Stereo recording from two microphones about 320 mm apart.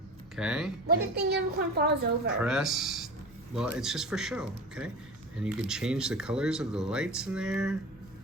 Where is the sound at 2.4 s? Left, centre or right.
Centre.